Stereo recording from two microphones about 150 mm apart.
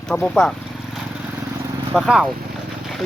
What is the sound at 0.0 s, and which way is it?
Speech, 5° left (ahead or behind).